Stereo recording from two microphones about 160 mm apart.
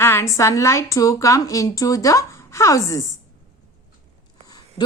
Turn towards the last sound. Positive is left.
turn(degrees=25)  # may be behind; listen again after turning